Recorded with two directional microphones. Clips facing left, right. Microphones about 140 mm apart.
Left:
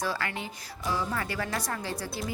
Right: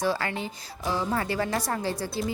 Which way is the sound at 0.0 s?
30° right (ahead or behind).